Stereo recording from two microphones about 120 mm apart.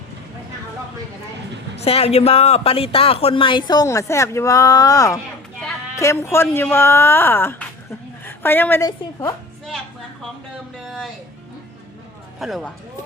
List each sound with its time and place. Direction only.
1.8 s speech: 55° left (ahead or behind); by 8.8 s 15° left (ahead or behind)
8.8 s a woman's voice: 35° left (ahead or behind)
10.8 s music: centre (ahead or behind)
12.4 s speech: centre (ahead or behind)